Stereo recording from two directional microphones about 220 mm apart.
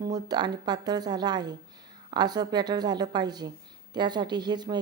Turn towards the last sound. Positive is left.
turn(degrees=-20)  # may be behind; listen again after turning